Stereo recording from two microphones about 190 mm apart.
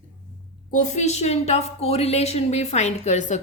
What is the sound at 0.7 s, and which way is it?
A woman's voice, 40° left (ahead or behind).